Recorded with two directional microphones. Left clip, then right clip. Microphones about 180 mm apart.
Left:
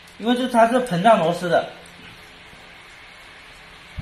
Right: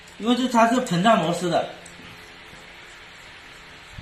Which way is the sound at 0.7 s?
Centre (ahead or behind).